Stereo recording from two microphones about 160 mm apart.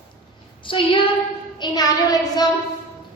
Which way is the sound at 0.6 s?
30° left (ahead or behind).